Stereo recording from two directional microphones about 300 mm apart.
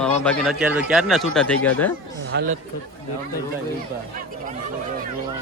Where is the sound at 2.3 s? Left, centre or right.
Right.